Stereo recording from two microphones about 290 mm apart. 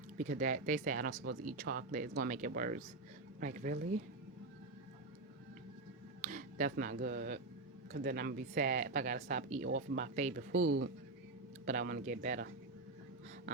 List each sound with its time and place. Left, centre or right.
0.2 s speech: right
6.2 s speech: right
10.6 s speech: right
11.6 s speech: right